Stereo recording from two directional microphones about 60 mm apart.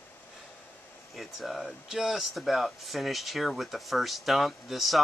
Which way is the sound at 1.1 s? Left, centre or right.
Centre.